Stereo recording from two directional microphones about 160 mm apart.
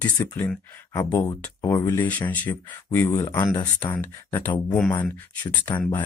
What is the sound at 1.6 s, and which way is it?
Speech, 20° left (ahead or behind).